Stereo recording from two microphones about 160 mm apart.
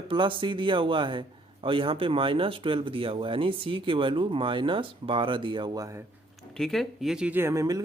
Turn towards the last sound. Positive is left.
turn(degrees=-20)  # may be behind; listen again after turning